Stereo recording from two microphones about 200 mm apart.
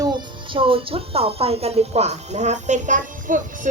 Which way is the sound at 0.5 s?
25° right (ahead or behind).